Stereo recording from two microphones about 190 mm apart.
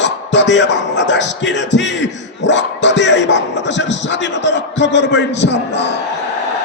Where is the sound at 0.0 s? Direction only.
70° left (ahead or behind).